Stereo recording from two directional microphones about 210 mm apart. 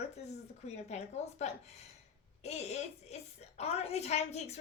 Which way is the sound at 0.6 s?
30° left (ahead or behind).